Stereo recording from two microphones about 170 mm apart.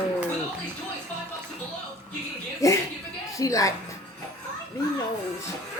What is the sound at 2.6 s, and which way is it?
Speech, 20° left (ahead or behind).